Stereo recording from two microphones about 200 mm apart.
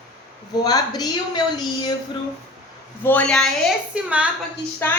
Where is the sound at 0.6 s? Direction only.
20° left (ahead or behind).